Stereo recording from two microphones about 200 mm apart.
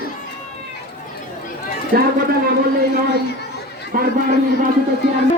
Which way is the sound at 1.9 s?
50° right (ahead or behind).